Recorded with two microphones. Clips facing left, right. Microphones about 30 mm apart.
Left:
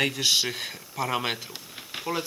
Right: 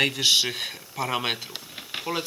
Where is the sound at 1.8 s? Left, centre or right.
Centre.